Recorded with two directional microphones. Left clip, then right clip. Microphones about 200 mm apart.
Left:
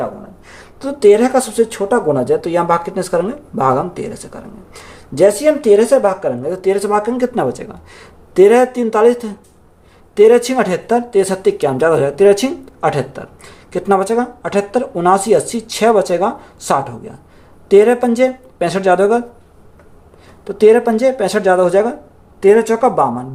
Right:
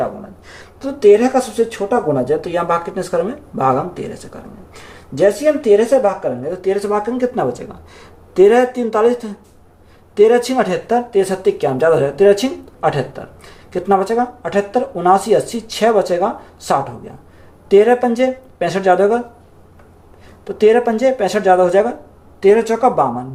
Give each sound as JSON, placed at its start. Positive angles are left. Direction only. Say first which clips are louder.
{"t": 0.4, "sound": "speech", "louder": "left 2 dB", "side_deg": 25}
{"t": 20.5, "sound": "speech", "louder": "left 2 dB", "side_deg": 25}